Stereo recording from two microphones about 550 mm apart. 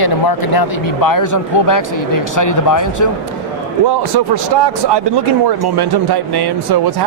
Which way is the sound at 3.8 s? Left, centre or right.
Right.